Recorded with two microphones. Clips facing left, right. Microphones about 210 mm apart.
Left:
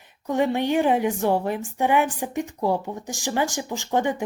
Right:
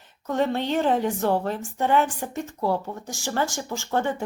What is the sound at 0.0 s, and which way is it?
A woman's voice, 15° left (ahead or behind).